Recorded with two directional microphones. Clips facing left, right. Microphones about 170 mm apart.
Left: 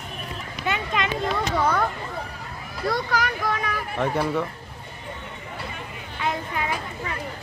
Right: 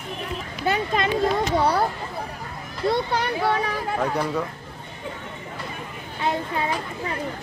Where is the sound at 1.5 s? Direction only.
35° right (ahead or behind).